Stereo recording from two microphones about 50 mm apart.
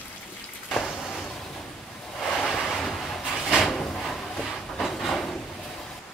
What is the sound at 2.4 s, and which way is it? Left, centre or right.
Waves, centre.